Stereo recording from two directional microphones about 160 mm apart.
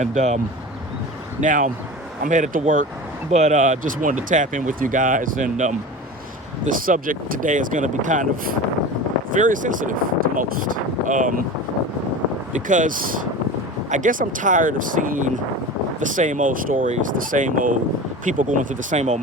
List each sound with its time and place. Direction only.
0.0 s speech: 50° right (ahead or behind)
1.4 s speech: 50° right (ahead or behind)
12.5 s speech: 55° right (ahead or behind)